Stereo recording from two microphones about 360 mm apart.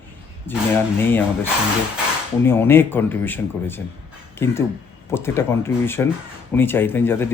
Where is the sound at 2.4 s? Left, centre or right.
Centre.